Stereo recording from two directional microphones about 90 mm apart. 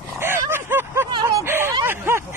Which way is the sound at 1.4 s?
25° right (ahead or behind).